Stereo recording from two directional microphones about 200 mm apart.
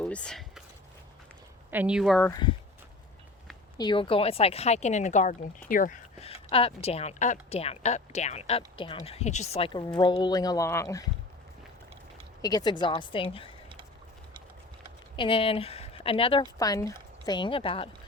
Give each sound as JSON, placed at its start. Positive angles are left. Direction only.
{"t": 0.0, "sound": "a sound", "side_deg": 5}
{"t": 1.7, "sound": "speech", "side_deg": -5}
{"t": 3.8, "sound": "speech", "side_deg": 25}
{"t": 12.4, "sound": "a woman's voice", "side_deg": 20}
{"t": 15.1, "sound": "speech", "side_deg": 25}